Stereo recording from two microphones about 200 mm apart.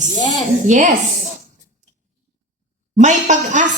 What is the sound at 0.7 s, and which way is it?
Speech, 40° right (ahead or behind).